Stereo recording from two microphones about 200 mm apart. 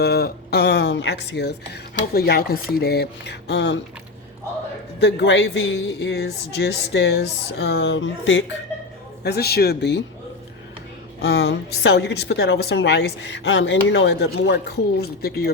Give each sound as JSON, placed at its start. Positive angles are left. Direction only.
{"t": 0.0, "sound": "a woman's voice", "side_deg": 50}
{"t": 4.9, "sound": "a woman's voice", "side_deg": 60}
{"t": 9.2, "sound": "speech", "side_deg": 55}
{"t": 11.2, "sound": "a woman's voice", "side_deg": 60}